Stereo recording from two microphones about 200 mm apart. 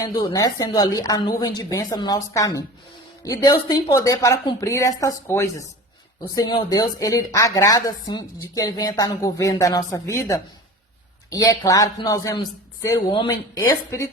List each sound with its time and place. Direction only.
0.0 s a woman's voice: 20° left (ahead or behind)